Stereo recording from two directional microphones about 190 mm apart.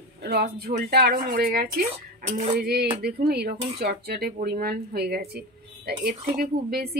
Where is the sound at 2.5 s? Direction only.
55° right (ahead or behind).